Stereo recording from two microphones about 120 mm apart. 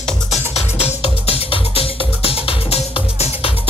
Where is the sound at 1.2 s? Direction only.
55° left (ahead or behind).